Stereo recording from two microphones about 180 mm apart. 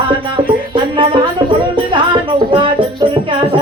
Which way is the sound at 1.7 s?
30° right (ahead or behind).